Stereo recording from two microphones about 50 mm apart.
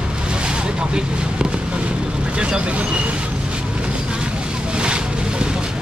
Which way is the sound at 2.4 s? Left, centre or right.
Right.